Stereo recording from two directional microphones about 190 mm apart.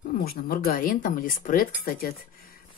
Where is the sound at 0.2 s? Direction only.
50° left (ahead or behind).